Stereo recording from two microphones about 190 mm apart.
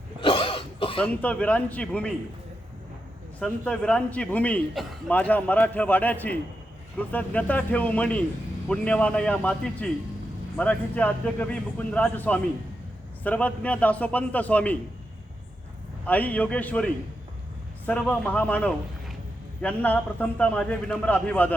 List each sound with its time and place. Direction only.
0.2 s throat clearing: 30° left (ahead or behind)
1.0 s a man's voice: 5° left (ahead or behind)
3.4 s a man's voice: 5° left (ahead or behind)
16.0 s a man's voice: 10° left (ahead or behind)